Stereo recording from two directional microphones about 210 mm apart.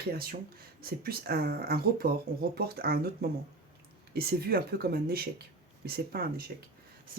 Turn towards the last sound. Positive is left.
turn(degrees=-45)  # may be behind; listen again after turning